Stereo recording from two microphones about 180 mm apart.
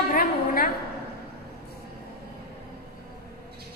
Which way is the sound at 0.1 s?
55° left (ahead or behind).